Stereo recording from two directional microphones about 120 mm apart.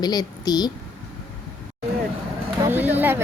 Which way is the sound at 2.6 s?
15° right (ahead or behind).